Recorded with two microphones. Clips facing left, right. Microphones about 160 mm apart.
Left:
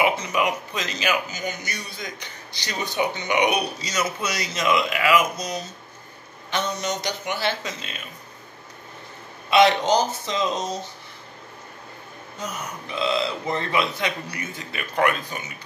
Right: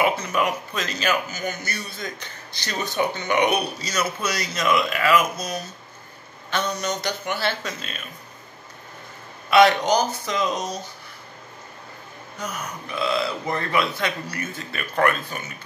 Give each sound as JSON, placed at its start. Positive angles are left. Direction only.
{"t": 0.0, "sound": "speech", "side_deg": 15}
{"t": 9.5, "sound": "speech", "side_deg": 20}
{"t": 12.4, "sound": "speech", "side_deg": 20}